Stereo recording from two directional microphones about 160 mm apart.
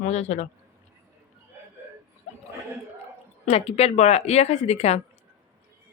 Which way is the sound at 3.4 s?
40° left (ahead or behind).